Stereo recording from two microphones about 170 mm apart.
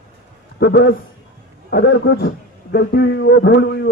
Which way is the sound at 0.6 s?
70° left (ahead or behind).